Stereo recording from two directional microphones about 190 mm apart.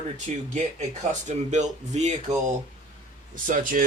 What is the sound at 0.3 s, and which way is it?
Speech, 35° right (ahead or behind).